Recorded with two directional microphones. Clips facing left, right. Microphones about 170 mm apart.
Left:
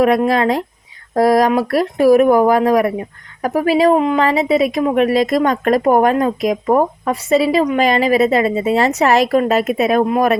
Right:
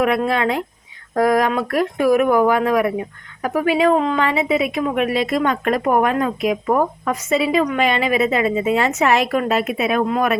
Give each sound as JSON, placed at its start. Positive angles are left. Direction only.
{"t": 0.3, "sound": "speech", "side_deg": 35}